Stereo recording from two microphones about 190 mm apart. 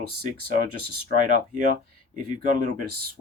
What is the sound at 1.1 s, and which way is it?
Speech, 45° right (ahead or behind).